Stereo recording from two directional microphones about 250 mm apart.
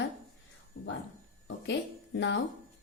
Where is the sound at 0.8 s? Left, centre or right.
Left.